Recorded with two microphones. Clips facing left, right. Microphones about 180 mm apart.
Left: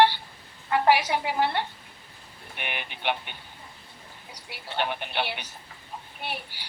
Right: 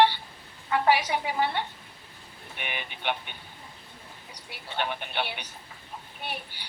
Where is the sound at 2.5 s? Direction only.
55° left (ahead or behind).